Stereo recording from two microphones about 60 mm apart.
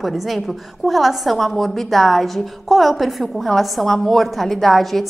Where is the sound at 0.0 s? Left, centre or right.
Centre.